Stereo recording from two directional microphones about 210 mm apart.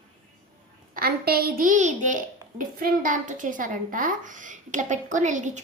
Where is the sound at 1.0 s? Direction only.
45° right (ahead or behind).